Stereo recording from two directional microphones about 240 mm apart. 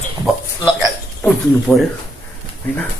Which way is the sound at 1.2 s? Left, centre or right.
Centre.